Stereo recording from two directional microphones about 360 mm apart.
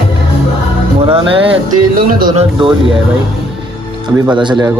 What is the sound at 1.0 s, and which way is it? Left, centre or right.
Speech, centre.